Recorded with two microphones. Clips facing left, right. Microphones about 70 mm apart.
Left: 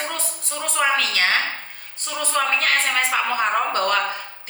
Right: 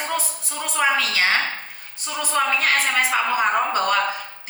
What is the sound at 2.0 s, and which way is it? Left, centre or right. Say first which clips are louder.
A woman's voice: right 1 dB; centre.